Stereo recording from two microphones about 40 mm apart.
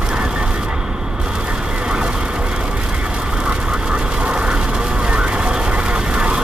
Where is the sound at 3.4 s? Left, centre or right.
Right.